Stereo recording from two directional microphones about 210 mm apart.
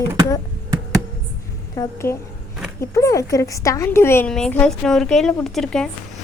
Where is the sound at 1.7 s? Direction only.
15° left (ahead or behind).